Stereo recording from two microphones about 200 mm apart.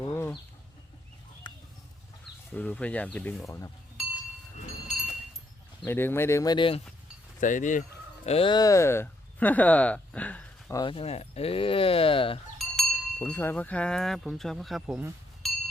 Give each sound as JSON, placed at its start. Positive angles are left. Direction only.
{"t": 0.0, "sound": "chicken", "side_deg": 10}
{"t": 1.5, "sound": "a sound", "side_deg": 25}
{"t": 2.6, "sound": "speech", "side_deg": 5}
{"t": 5.8, "sound": "speech", "side_deg": 10}
{"t": 7.3, "sound": "speech", "side_deg": 40}
{"t": 10.8, "sound": "speech", "side_deg": 25}
{"t": 12.5, "sound": "speech", "side_deg": 5}